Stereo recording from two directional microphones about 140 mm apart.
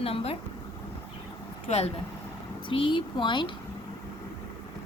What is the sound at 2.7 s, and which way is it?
Speech, 35° left (ahead or behind).